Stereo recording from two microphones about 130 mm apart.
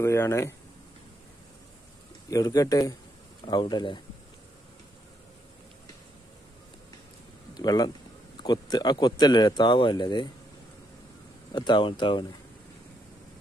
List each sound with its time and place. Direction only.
0.0 s speech: 20° left (ahead or behind)
2.2 s a man's voice: 30° left (ahead or behind)
7.5 s a man's voice: 30° left (ahead or behind)
11.5 s a man's voice: 35° left (ahead or behind)